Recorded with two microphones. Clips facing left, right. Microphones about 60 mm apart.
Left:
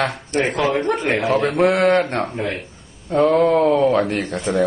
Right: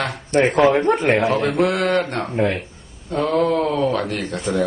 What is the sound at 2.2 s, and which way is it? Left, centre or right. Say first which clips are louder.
Speech: right 3 dB; centre.